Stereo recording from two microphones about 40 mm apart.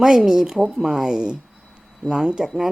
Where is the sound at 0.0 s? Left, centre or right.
Centre.